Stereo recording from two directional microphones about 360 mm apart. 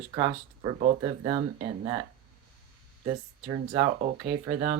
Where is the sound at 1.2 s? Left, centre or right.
Centre.